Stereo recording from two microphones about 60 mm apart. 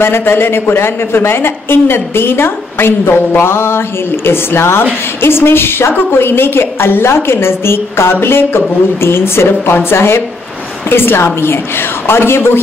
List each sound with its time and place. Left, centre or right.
0.0 s a woman's voice: left